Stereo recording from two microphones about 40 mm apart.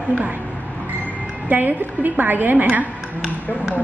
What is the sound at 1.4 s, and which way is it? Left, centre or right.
A woman's voice, right.